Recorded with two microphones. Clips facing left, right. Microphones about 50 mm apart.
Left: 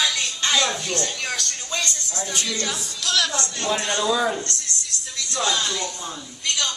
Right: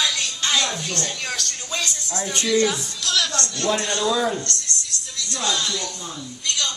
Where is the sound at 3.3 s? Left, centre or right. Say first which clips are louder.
Right 2 dB; centre.